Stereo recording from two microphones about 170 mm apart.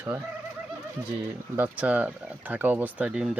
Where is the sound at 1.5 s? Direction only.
10° right (ahead or behind).